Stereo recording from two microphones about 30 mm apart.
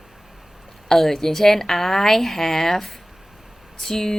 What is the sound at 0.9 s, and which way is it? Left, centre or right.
A woman's voice, centre.